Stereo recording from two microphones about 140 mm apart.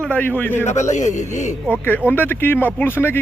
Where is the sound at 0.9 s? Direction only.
60° left (ahead or behind).